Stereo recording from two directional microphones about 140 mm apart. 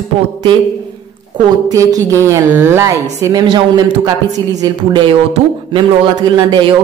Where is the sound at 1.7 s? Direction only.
25° right (ahead or behind).